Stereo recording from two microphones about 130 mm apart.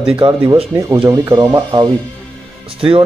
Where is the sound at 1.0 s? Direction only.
25° right (ahead or behind).